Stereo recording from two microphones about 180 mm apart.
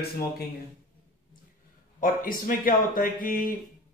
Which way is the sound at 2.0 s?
50° left (ahead or behind).